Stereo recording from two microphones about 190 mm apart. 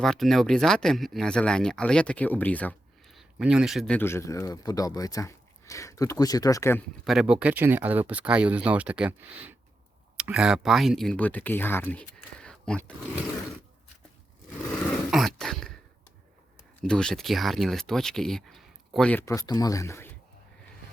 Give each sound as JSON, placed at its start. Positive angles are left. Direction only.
{"t": 0.0, "sound": "speech", "side_deg": 0}
{"t": 7.0, "sound": "speech", "side_deg": 0}
{"t": 15.1, "sound": "throat clearing", "side_deg": 0}
{"t": 16.8, "sound": "speech", "side_deg": 5}
{"t": 19.2, "sound": "speech", "side_deg": 15}